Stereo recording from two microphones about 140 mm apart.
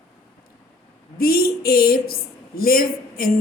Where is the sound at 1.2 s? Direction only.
90° left.